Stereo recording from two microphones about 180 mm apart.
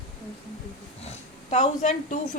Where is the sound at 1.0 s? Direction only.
40° left (ahead or behind).